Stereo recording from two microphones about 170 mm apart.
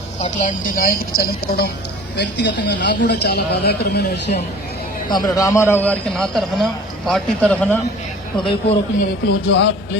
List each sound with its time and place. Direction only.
0.2 s a woman's voice: 45° left (ahead or behind); by 1.7 s 65° left (ahead or behind)
2.1 s speech: 90° left; by 4.4 s 70° left (ahead or behind)
5.0 s a man's voice: 25° left (ahead or behind); by 7.8 s 10° left (ahead or behind)
9.2 s speech: 90° left